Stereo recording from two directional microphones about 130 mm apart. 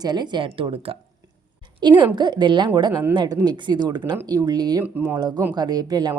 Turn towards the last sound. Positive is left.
turn(degrees=-30)  # may be behind; listen again after turning